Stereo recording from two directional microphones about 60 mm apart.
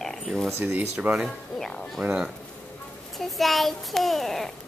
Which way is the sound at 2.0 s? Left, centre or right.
Centre.